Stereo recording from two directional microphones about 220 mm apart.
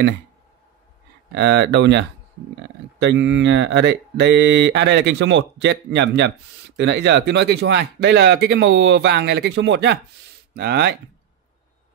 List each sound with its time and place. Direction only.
1.3 s speech: 50° right (ahead or behind)